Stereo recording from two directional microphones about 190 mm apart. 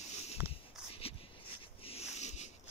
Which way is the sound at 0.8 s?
5° right (ahead or behind).